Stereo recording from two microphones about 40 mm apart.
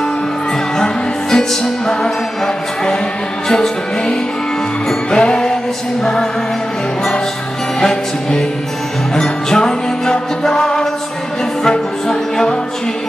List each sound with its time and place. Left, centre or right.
0.7 s music: centre
7.8 s music: centre